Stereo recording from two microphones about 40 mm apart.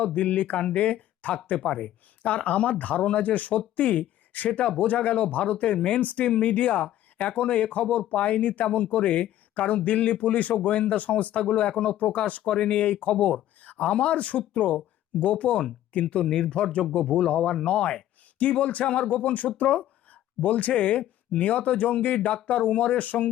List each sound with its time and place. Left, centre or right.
0.1 s speech: left
12.5 s speech: left
12.8 s speech: left
13.6 s a sound: left
13.9 s speech: left
16.2 s speech: centre
16.8 s speech: left